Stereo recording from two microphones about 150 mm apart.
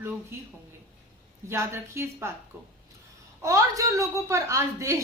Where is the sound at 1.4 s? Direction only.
20° right (ahead or behind).